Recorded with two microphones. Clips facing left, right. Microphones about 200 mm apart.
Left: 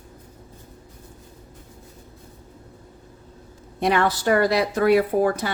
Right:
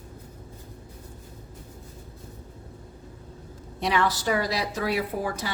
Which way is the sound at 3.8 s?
55° left (ahead or behind).